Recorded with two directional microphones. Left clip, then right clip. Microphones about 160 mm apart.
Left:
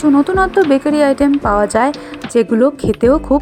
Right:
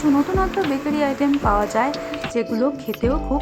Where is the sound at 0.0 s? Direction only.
45° left (ahead or behind).